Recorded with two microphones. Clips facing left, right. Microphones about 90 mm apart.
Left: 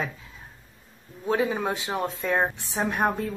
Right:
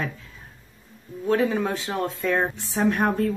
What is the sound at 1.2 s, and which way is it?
Speech, 15° left (ahead or behind).